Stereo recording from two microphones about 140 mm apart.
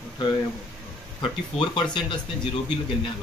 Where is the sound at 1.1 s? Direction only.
35° left (ahead or behind).